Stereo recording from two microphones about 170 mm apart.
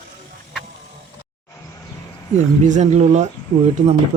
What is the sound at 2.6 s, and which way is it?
Speech, 45° right (ahead or behind).